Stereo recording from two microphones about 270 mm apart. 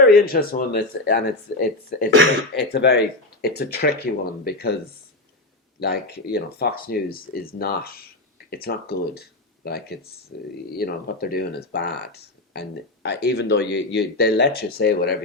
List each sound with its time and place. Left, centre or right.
0.0 s speech: left
5.8 s speech: left